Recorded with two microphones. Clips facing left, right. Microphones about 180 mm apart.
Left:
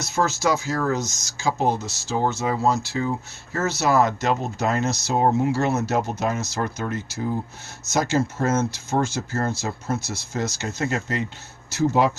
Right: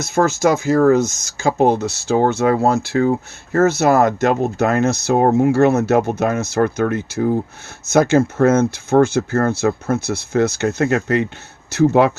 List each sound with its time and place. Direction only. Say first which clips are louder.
0.0 s speech: right 7 dB; 55° right (ahead or behind)